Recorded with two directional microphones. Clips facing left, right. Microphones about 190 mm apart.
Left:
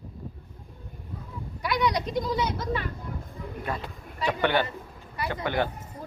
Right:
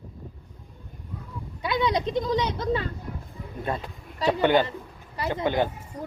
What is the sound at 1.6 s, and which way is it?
Sheep, 25° right (ahead or behind).